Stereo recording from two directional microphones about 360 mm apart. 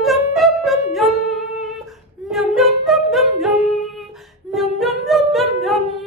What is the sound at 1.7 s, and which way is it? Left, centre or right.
Singing, centre.